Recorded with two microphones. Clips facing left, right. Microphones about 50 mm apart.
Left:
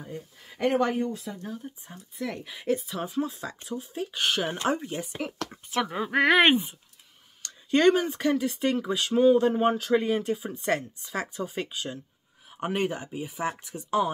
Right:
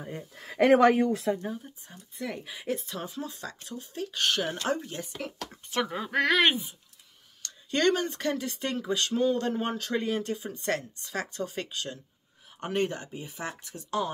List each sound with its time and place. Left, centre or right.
0.4 s speech: right
1.6 s speech: centre
2.1 s speech: centre
5.7 s speech: centre; by 6.7 s left
7.4 s speech: centre